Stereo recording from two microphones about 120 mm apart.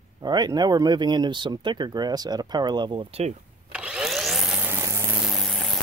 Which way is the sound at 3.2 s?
60° right (ahead or behind).